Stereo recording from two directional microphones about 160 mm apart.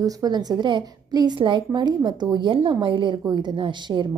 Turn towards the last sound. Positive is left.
turn(degrees=-30)  # may be behind; listen again after turning